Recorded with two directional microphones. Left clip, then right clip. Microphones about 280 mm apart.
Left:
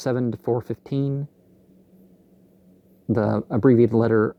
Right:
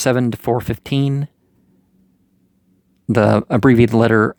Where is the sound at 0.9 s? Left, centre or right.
Right.